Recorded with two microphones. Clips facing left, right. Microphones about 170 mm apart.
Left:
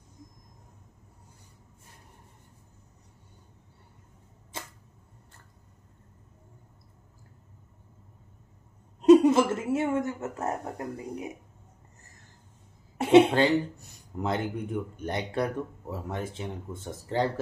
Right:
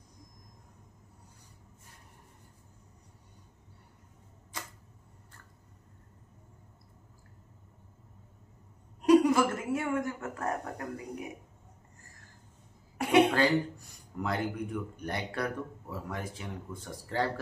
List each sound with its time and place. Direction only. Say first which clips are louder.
4.5 s a sound: left 2 dB; 25° left (ahead or behind)
9.0 s speech: left 5 dB; 25° left (ahead or behind)
12.9 s cough: left 6 dB; 25° left (ahead or behind)
14.1 s speech: left 3 dB; 25° left (ahead or behind)